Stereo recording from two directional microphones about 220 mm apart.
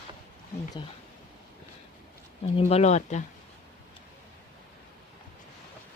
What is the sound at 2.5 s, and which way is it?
Speech, 30° left (ahead or behind).